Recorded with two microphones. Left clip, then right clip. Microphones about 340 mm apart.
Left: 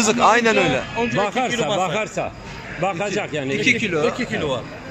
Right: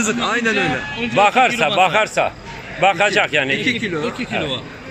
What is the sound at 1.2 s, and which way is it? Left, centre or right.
Speech, right.